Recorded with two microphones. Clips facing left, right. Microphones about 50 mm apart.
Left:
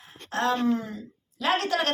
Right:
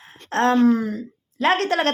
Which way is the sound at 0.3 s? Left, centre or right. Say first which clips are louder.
Right 8 dB; right.